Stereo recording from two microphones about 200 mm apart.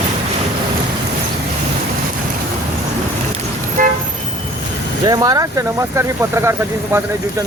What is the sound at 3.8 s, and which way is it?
Toot, 45° right (ahead or behind).